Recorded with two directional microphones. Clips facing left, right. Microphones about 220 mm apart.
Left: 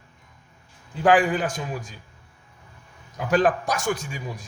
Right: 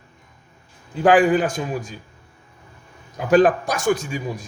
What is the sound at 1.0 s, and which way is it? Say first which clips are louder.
Speech: right 4 dB; 15° right (ahead or behind).